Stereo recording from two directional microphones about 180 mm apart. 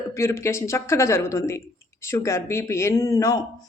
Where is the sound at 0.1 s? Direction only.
15° left (ahead or behind).